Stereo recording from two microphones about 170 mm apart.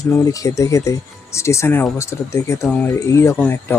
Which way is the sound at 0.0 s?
20° left (ahead or behind).